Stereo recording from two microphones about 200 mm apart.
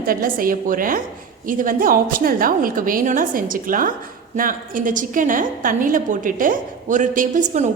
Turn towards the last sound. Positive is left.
turn(degrees=-40)  # may be behind; listen again after turning